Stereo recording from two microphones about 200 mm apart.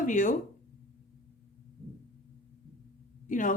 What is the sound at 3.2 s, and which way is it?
Speech, 40° left (ahead or behind).